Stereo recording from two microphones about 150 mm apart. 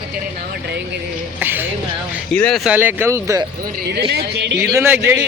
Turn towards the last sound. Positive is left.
turn(degrees=-15)  # may be behind; listen again after turning